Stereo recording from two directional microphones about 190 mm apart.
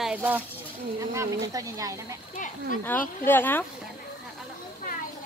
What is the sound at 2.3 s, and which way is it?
Speech, 45° left (ahead or behind).